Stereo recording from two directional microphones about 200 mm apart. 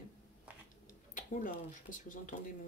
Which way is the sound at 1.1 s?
40° left (ahead or behind).